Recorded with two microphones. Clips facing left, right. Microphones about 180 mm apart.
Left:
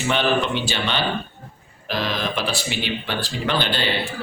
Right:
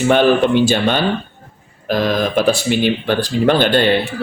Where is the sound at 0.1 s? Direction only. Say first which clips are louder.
Right 8 dB; 50° right (ahead or behind).